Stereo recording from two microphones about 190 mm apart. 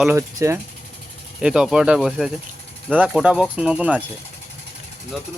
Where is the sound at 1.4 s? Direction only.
5° right (ahead or behind).